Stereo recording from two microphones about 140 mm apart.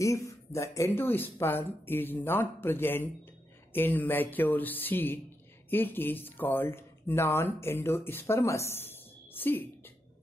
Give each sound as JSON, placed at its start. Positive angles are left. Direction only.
{"t": 0.0, "sound": "speech", "side_deg": 20}